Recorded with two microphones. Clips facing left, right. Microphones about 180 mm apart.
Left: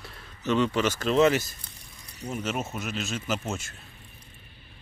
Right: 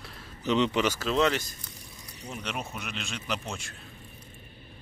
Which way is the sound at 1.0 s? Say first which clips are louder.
Left 4 dB; 10° left (ahead or behind).